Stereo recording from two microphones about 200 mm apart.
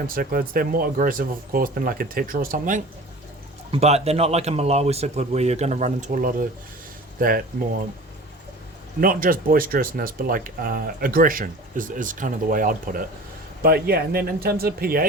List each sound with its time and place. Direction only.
0.1 s speech: 45° right (ahead or behind)
3.7 s speech: 30° right (ahead or behind)
9.0 s speech: 45° right (ahead or behind)